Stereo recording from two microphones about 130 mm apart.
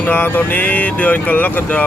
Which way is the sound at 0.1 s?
15° left (ahead or behind).